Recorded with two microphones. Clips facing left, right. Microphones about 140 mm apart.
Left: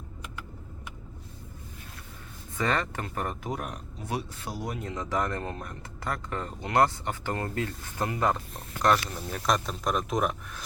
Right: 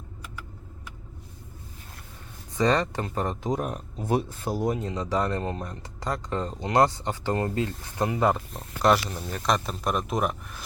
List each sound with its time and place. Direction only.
2.6 s speech: 20° right (ahead or behind)
2.8 s speech: 30° right (ahead or behind)
4.0 s speech: 40° right (ahead or behind)
4.7 s speech: 20° right (ahead or behind)
8.8 s speech: 5° right (ahead or behind)